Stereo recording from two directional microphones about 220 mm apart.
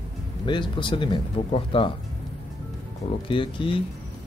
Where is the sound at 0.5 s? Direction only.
20° left (ahead or behind).